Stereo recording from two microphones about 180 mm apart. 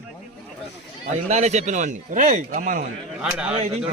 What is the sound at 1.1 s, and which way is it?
A man's voice, 40° right (ahead or behind).